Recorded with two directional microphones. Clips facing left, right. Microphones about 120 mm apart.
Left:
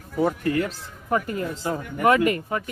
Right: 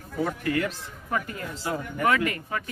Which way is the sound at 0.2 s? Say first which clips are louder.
Left 4 dB; 30° left (ahead or behind).